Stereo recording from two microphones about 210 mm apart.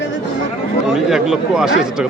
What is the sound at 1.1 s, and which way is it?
A man's voice, centre (ahead or behind).